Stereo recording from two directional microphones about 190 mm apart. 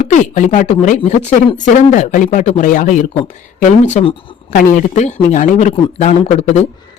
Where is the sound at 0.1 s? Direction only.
40° left (ahead or behind).